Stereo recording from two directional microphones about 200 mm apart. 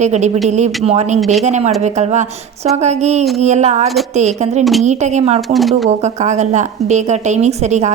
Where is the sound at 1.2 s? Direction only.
Centre (ahead or behind).